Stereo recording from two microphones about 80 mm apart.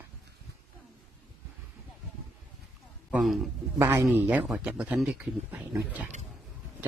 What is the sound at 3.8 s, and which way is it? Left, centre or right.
Speech, right.